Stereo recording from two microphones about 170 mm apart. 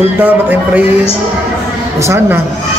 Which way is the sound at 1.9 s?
15° right (ahead or behind).